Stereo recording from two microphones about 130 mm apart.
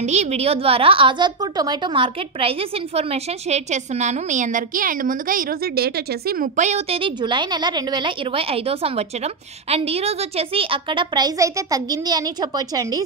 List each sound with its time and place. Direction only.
0.0 s a woman's voice: 60° right (ahead or behind)
6.9 s a woman's voice: 40° right (ahead or behind)